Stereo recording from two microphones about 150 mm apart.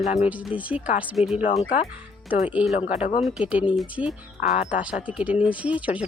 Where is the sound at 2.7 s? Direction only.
45° left (ahead or behind).